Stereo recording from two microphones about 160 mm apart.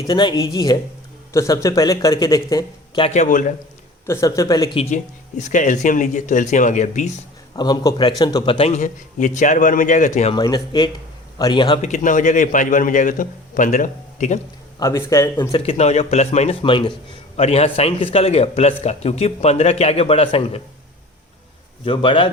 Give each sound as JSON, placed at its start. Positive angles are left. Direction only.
{"t": 0.0, "sound": "a man's voice", "side_deg": 25}
{"t": 3.0, "sound": "a man's voice", "side_deg": 45}
{"t": 4.0, "sound": "a man's voice", "side_deg": 20}
{"t": 4.7, "sound": "a man's voice", "side_deg": 40}
{"t": 5.4, "sound": "a man's voice", "side_deg": 50}
{"t": 7.5, "sound": "a man's voice", "side_deg": 25}
{"t": 8.5, "sound": "a man's voice", "side_deg": 40}
{"t": 10.3, "sound": "a man's voice", "side_deg": 25}
{"t": 11.8, "sound": "a man's voice", "side_deg": 50}
{"t": 14.8, "sound": "a man's voice", "side_deg": 20}
{"t": 15.8, "sound": "a man's voice", "side_deg": 45}
{"t": 21.8, "sound": "a man's voice", "side_deg": 30}